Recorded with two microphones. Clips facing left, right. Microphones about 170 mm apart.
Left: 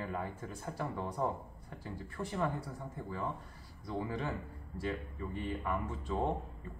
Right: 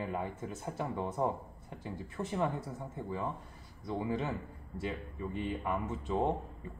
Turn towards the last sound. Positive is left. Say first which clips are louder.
# right 3 dB
turn(degrees=-20)  # may be behind; listen again after turning